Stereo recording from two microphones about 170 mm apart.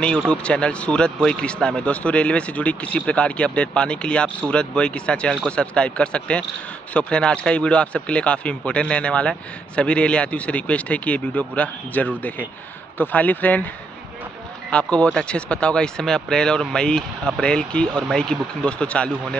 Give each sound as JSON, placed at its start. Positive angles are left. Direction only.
{"t": 0.0, "sound": "a man's voice", "side_deg": 5}
{"t": 14.7, "sound": "speech", "side_deg": 5}